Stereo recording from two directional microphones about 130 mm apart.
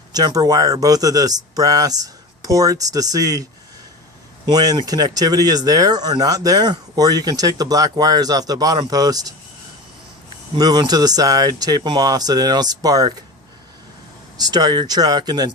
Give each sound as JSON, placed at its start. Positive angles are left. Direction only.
{"t": 0.1, "sound": "speech", "side_deg": -30}
{"t": 4.4, "sound": "speech", "side_deg": -30}
{"t": 10.5, "sound": "speech", "side_deg": -30}
{"t": 14.3, "sound": "speech", "side_deg": -30}